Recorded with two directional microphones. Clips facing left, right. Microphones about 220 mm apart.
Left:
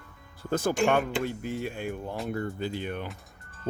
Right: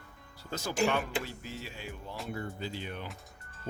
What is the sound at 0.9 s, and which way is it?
Speech, 55° left (ahead or behind).